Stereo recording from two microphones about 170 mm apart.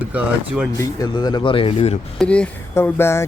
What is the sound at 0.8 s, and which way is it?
Speech, 25° left (ahead or behind).